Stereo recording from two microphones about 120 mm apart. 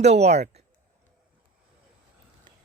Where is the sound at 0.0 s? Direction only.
65° right (ahead or behind).